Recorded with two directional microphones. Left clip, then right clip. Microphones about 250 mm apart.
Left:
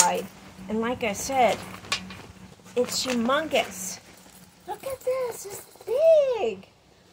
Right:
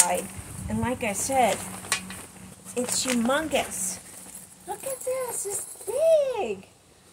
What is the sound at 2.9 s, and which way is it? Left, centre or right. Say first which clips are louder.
A woman's voice: right 3 dB; left.